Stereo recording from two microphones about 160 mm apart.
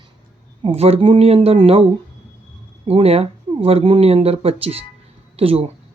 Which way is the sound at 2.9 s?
40° right (ahead or behind).